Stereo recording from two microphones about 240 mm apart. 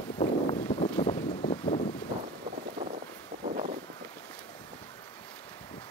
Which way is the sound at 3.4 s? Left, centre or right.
Right.